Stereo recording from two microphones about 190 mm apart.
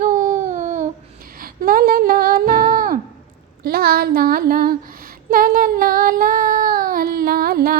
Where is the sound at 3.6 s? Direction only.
55° right (ahead or behind).